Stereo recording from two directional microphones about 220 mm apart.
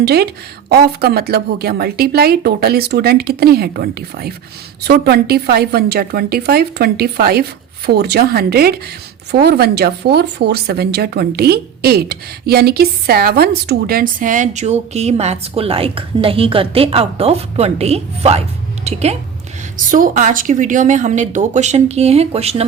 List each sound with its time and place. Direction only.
0.0 s a woman's voice: 45° right (ahead or behind); by 22.6 s 25° right (ahead or behind)